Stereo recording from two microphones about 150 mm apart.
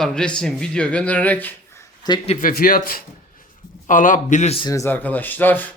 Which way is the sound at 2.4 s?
70° left (ahead or behind).